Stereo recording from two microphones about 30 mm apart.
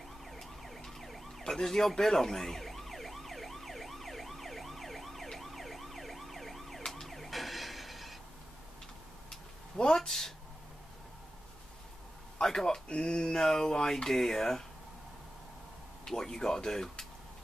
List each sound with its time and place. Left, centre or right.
0.2 s emergency vehicle: centre
1.5 s speech: centre
2.0 s emergency vehicle: centre
9.9 s speech: centre
12.6 s speech: left
16.1 s speech: centre